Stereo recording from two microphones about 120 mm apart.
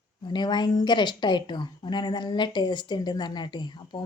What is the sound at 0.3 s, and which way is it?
A woman's voice, 40° left (ahead or behind).